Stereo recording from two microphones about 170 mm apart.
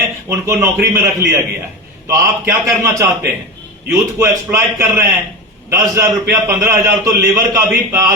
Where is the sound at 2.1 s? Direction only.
20° right (ahead or behind).